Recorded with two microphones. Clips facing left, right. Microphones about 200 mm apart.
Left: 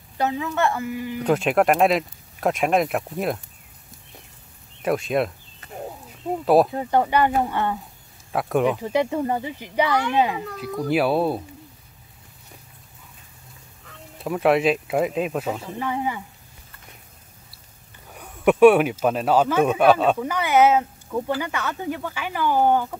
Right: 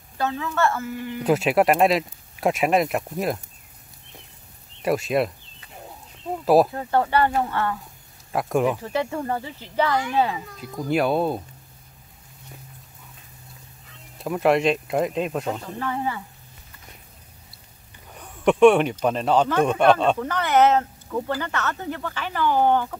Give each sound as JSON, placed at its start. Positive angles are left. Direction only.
{"t": 0.2, "sound": "speech", "side_deg": 15}
{"t": 1.2, "sound": "speech", "side_deg": -5}
{"t": 4.8, "sound": "speech", "side_deg": 0}
{"t": 6.4, "sound": "speech", "side_deg": 0}
{"t": 6.7, "sound": "speech", "side_deg": 15}
{"t": 8.3, "sound": "speech", "side_deg": 0}
{"t": 8.7, "sound": "speech", "side_deg": 15}
{"t": 10.9, "sound": "speech", "side_deg": 5}
{"t": 14.1, "sound": "speech", "side_deg": 0}
{"t": 15.9, "sound": "speech", "side_deg": 15}
{"t": 18.1, "sound": "speech", "side_deg": 5}